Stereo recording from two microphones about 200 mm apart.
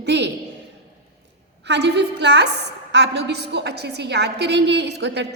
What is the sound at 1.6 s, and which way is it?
A woman's voice, 60° right (ahead or behind).